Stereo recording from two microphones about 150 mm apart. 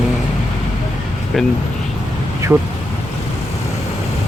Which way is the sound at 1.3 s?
Centre (ahead or behind).